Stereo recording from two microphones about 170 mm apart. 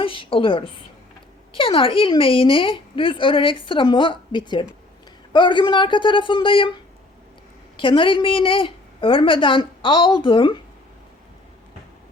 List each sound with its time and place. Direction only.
0.0 s a woman's voice: 30° left (ahead or behind)
7.8 s a woman's voice: 30° left (ahead or behind)